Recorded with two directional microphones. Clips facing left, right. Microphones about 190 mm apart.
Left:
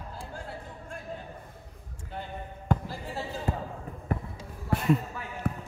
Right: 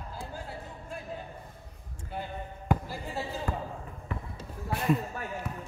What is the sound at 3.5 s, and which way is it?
Basketball bounce, 25° left (ahead or behind).